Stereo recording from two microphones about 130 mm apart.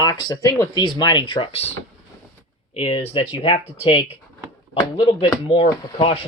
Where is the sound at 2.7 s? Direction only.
45° left (ahead or behind).